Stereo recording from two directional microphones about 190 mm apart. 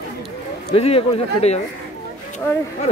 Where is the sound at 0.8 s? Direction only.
30° left (ahead or behind).